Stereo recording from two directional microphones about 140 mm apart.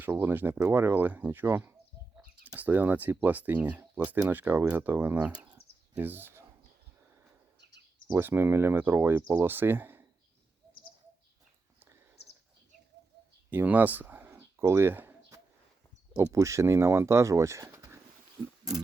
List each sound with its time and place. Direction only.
0.0 s speech: 15° right (ahead or behind)
8.0 s speech: 15° right (ahead or behind)
13.5 s a sound: 10° right (ahead or behind)
16.1 s speech: 20° right (ahead or behind)